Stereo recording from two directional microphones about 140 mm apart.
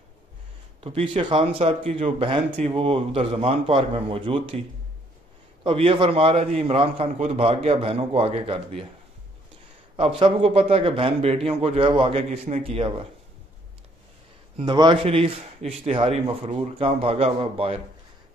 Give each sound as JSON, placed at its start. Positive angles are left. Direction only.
{"t": 0.7, "sound": "a man's voice", "side_deg": -45}
{"t": 5.6, "sound": "a man's voice", "side_deg": -40}
{"t": 9.9, "sound": "a man's voice", "side_deg": -40}
{"t": 14.6, "sound": "a man's voice", "side_deg": -35}